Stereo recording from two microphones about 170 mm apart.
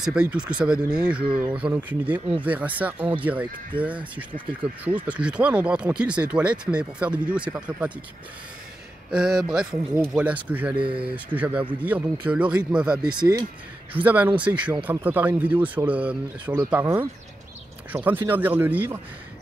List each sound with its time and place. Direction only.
0.0 s speech: 5° right (ahead or behind)
3.7 s speech: 30° right (ahead or behind)
5.0 s speech: 5° right (ahead or behind)
9.1 s speech: 5° right (ahead or behind)
10.8 s speech: 30° right (ahead or behind)
11.3 s speech: 10° right (ahead or behind)
13.0 s speech: 25° right (ahead or behind)
14.0 s speech: 10° right (ahead or behind)
17.9 s speech: 15° right (ahead or behind)